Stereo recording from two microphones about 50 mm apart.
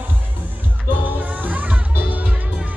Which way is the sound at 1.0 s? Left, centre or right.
Right.